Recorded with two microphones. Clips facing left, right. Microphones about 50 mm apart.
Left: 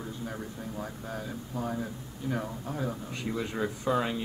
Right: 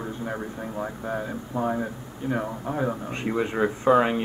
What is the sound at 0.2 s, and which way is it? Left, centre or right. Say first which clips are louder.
A man's voice: right 6 dB; right.